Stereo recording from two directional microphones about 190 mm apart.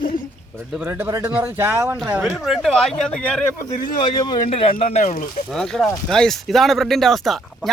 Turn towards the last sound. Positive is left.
turn(degrees=0)  # may be behind; listen again after turning